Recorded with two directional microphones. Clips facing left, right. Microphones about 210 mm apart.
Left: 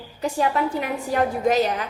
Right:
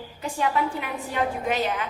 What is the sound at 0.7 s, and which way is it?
Speech, 40° left (ahead or behind).